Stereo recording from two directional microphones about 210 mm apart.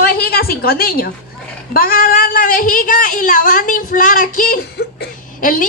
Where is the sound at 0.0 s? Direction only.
45° left (ahead or behind).